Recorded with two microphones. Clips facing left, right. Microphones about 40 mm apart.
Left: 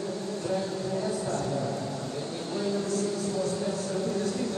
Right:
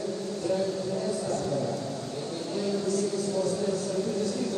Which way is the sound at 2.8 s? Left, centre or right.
Left.